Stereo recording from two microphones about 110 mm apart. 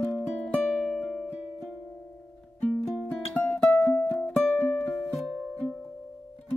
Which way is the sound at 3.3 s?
10° left (ahead or behind).